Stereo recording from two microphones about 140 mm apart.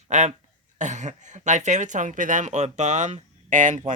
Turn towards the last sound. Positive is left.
turn(degrees=-60)  # may be behind; listen again after turning